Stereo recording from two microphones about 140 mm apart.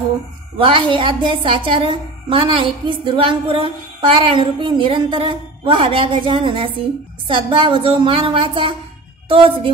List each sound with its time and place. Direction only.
0.6 s a woman's voice: 40° right (ahead or behind)